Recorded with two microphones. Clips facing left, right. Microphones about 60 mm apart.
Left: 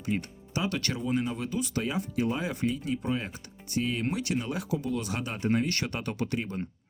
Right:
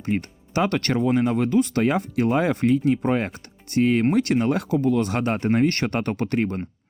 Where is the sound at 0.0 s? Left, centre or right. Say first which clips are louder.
Right 6 dB; right.